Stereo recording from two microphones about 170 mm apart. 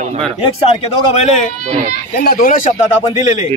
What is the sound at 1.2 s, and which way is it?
Speech, 45° left (ahead or behind).